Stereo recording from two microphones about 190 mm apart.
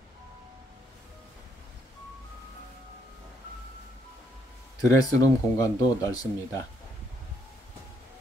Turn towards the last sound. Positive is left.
turn(degrees=20)  # may be behind; listen again after turning